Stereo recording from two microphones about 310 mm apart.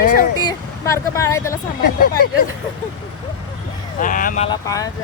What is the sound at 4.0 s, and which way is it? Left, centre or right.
Speech, left.